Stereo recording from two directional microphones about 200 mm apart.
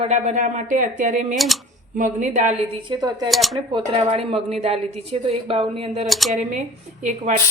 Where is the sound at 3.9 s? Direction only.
30° right (ahead or behind).